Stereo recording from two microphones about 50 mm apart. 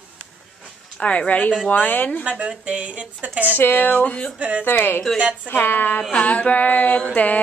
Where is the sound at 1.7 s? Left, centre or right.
Left.